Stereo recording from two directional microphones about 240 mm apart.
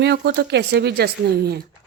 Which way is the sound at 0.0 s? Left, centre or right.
Right.